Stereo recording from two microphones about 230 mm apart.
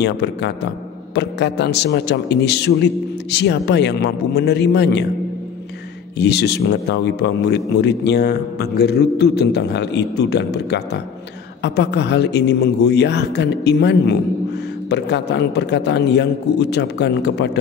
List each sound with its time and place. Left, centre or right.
0.0 s a man's voice: left
6.1 s a man's voice: left